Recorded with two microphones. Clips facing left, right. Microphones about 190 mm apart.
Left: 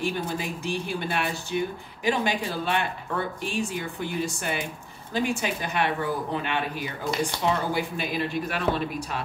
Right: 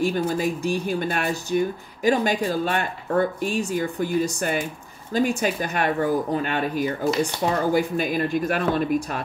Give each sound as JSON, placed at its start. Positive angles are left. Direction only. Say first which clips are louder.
{"t": 0.0, "sound": "speech", "louder": "right 7 dB", "side_deg": -45}